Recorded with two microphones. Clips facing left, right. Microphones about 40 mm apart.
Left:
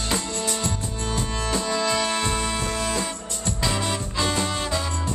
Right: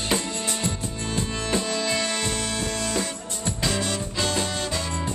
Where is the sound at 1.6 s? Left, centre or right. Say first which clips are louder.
Left 2 dB; centre.